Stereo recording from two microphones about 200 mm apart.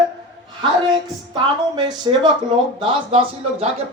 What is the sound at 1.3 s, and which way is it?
A woman's voice, 25° right (ahead or behind).